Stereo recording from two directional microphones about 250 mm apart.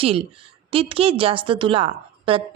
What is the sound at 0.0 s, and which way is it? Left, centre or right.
A woman's voice, right.